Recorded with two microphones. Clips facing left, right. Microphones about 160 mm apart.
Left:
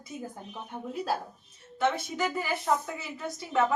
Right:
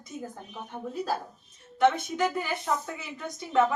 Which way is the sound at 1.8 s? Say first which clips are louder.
Right 4 dB; 5° left (ahead or behind).